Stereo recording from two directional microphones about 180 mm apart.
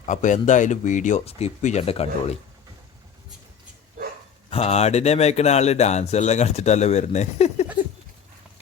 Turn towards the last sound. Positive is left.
turn(degrees=35)  # may be behind; listen again after turning